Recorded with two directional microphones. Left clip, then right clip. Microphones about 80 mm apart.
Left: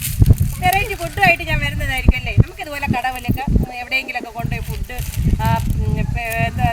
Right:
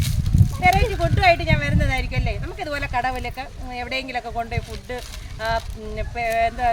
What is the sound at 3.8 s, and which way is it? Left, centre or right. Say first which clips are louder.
Speech: left 5 dB; right.